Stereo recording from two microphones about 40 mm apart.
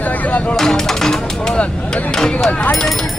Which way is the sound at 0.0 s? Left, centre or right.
Left.